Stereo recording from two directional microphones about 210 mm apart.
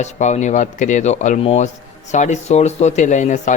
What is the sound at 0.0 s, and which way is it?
Speech, 35° left (ahead or behind).